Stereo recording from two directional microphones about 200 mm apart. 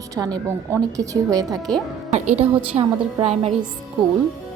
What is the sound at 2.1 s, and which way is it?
A woman's voice, 35° right (ahead or behind).